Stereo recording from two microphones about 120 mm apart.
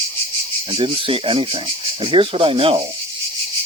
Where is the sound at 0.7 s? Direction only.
50° right (ahead or behind).